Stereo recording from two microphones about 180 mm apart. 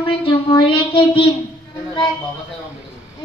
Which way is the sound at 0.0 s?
25° left (ahead or behind).